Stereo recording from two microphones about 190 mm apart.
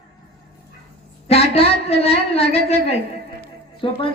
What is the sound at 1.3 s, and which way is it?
A man's voice, 30° left (ahead or behind).